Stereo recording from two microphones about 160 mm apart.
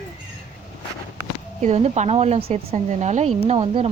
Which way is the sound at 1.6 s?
45° right (ahead or behind).